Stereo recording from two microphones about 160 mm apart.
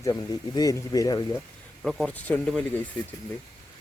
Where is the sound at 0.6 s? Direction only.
20° left (ahead or behind).